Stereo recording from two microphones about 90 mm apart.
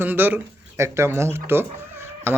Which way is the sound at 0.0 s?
20° right (ahead or behind).